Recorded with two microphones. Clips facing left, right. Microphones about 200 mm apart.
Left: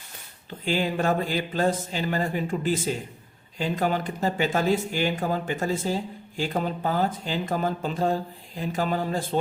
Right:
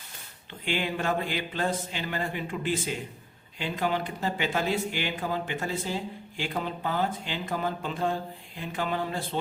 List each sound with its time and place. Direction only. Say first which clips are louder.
0.6 s speech: left 5 dB; 40° left (ahead or behind)